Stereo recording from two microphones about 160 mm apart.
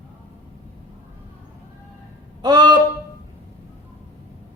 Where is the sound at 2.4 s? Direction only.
25° right (ahead or behind).